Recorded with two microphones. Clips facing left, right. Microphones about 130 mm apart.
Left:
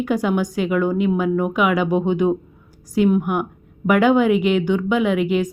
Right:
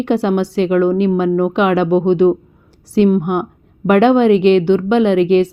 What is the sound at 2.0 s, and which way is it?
Speech, 70° right (ahead or behind).